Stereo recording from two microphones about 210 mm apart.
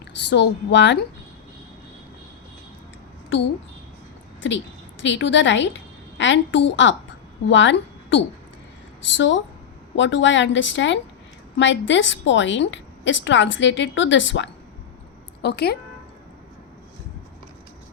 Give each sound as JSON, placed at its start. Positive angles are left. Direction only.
{"t": 0.0, "sound": "a woman's voice", "side_deg": 55}
{"t": 5.0, "sound": "a woman's voice", "side_deg": 60}